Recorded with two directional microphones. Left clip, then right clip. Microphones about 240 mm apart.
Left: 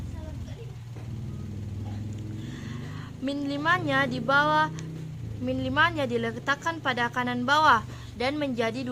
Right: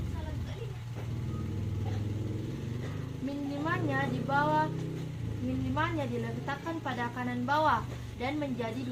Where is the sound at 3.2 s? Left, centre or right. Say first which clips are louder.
Left 8 dB; left.